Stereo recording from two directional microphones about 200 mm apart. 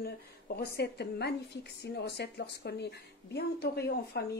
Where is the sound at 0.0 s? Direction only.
50° left (ahead or behind).